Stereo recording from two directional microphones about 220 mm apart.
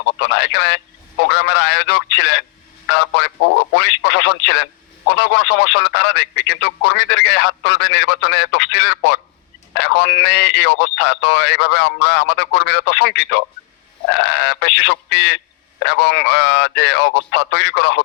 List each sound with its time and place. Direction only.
0.2 s speech: 50° left (ahead or behind)